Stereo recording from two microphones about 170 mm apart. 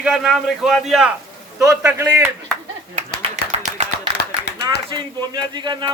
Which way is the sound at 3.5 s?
40° right (ahead or behind).